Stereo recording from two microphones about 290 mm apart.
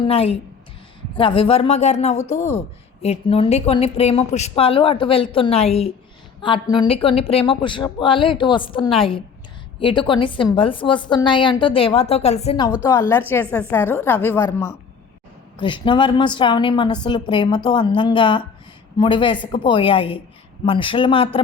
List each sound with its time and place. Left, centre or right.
0.1 s a woman's voice: centre